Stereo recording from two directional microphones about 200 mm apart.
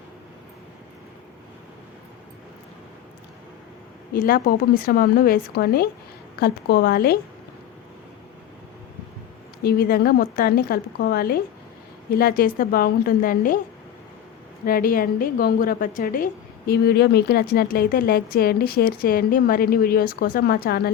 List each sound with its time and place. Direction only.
4.1 s a woman's voice: 45° left (ahead or behind)
9.6 s a woman's voice: 50° left (ahead or behind)
14.6 s a woman's voice: 45° left (ahead or behind)